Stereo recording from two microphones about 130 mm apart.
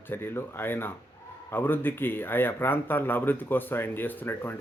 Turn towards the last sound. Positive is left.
turn(degrees=15)  # may be behind; listen again after turning